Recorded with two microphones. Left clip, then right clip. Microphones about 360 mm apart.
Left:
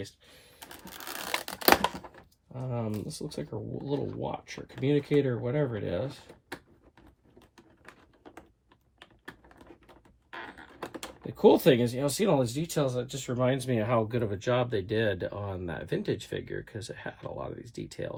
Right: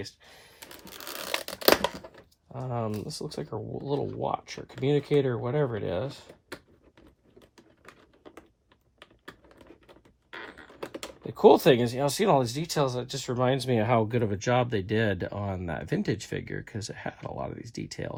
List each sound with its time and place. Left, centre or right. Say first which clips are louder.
0.6 s a sound: even; centre
2.5 s speech: right 3 dB; centre
5.2 s speech: right 2 dB; centre
6.0 s speech: right 2 dB; centre
7.3 s typing: right 1 dB; centre
9.0 s computer keyboard: even; centre
11.9 s speech: right 3 dB; centre